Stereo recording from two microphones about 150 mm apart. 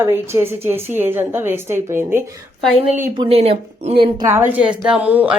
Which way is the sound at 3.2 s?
40° right (ahead or behind).